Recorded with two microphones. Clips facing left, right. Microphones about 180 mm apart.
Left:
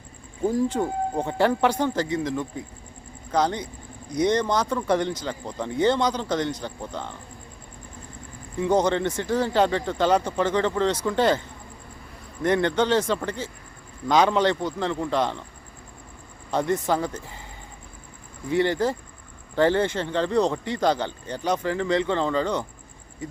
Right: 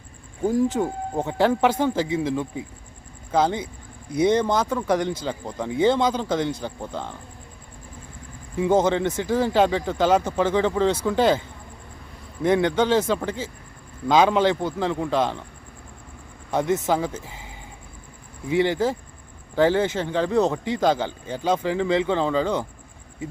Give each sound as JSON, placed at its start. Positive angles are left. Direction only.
{"t": 0.4, "sound": "speech", "side_deg": 0}
{"t": 8.6, "sound": "speech", "side_deg": -5}
{"t": 16.5, "sound": "speech", "side_deg": -10}
{"t": 18.4, "sound": "speech", "side_deg": -5}